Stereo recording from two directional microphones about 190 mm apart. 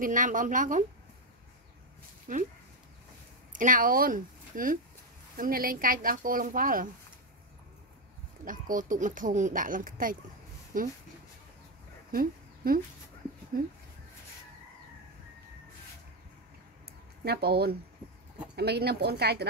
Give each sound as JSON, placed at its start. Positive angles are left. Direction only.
{"t": 0.0, "sound": "speech", "side_deg": -45}
{"t": 2.3, "sound": "speech", "side_deg": -45}
{"t": 3.5, "sound": "speech", "side_deg": -45}
{"t": 8.5, "sound": "speech", "side_deg": -45}
{"t": 12.1, "sound": "a sound", "side_deg": -50}
{"t": 13.5, "sound": "speech", "side_deg": -50}
{"t": 17.2, "sound": "speech", "side_deg": -55}